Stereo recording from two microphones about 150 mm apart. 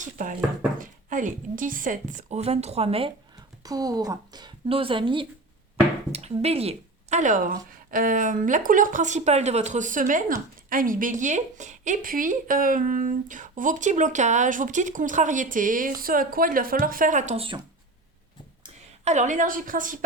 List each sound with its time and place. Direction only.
0.0 s a sound: 60° right (ahead or behind)
0.8 s speech: 60° right (ahead or behind); by 3.1 s 40° right (ahead or behind)
3.6 s a woman's voice: 25° right (ahead or behind)
6.1 s speech: 45° right (ahead or behind)
17.3 s speech: 35° right (ahead or behind)
19.0 s speech: 55° right (ahead or behind)